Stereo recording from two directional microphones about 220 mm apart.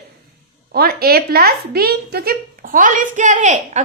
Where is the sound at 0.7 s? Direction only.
45° right (ahead or behind).